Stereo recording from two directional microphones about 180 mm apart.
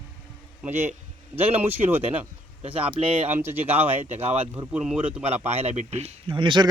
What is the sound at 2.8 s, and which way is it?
Speech, 35° right (ahead or behind).